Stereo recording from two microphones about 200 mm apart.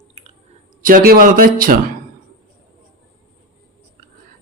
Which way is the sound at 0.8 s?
45° right (ahead or behind).